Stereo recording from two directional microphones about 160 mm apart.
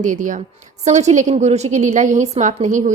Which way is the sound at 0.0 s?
55° right (ahead or behind).